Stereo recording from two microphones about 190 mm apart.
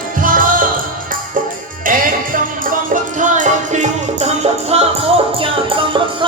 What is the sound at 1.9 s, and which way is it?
Music, 45° right (ahead or behind).